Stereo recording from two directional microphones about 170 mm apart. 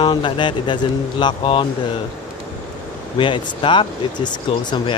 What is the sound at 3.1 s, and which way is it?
Speech, 30° left (ahead or behind).